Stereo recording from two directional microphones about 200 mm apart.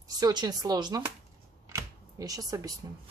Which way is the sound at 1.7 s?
20° right (ahead or behind).